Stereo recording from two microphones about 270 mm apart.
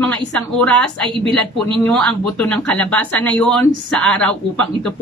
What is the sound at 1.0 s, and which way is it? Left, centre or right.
Speech, centre.